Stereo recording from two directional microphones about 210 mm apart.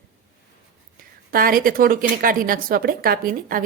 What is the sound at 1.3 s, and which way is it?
A woman's voice, 45° right (ahead or behind).